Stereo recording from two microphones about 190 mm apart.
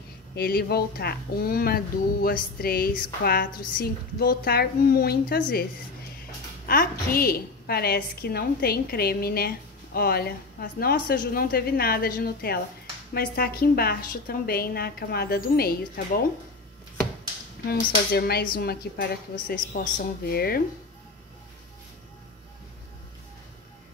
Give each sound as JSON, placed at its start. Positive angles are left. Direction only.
{"t": 0.4, "sound": "a woman's voice", "side_deg": 55}
{"t": 6.7, "sound": "a woman's voice", "side_deg": 50}
{"t": 17.6, "sound": "a woman's voice", "side_deg": 55}